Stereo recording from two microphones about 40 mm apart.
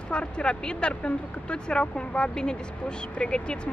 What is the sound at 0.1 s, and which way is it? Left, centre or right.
Speech, left.